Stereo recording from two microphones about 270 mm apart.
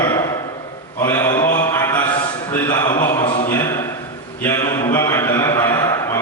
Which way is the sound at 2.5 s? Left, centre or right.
Centre.